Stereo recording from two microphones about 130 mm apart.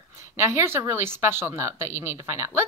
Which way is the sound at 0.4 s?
20° right (ahead or behind).